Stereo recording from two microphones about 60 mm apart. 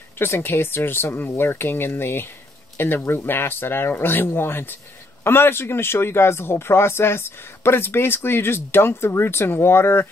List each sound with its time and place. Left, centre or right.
0.2 s a man's voice: left